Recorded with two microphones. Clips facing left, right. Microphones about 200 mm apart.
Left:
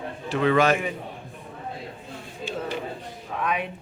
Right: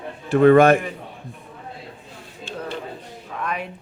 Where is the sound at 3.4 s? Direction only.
Centre (ahead or behind).